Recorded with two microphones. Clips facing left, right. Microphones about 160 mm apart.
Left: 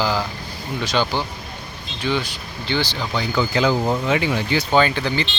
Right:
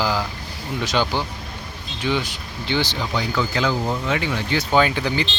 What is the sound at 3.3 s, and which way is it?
Speech, 5° left (ahead or behind).